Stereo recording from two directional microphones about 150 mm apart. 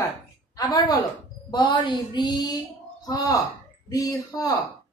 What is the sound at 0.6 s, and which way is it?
A woman's voice, 25° left (ahead or behind).